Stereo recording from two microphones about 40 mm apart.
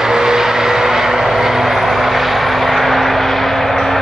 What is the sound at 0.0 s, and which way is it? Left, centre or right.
Vehicle, centre.